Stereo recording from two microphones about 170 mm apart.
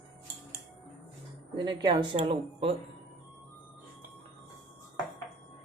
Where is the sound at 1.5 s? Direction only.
25° right (ahead or behind).